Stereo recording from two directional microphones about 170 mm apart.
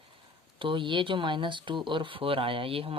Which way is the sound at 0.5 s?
30° right (ahead or behind).